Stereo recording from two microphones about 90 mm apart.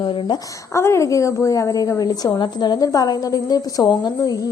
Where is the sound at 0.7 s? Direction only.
30° left (ahead or behind).